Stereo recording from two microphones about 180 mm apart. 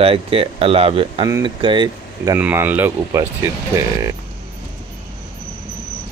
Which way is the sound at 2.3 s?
10° right (ahead or behind).